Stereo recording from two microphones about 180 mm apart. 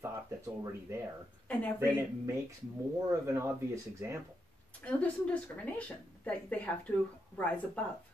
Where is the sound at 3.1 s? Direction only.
15° right (ahead or behind).